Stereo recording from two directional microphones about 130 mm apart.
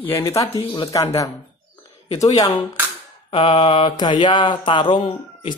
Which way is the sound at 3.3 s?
40° left (ahead or behind).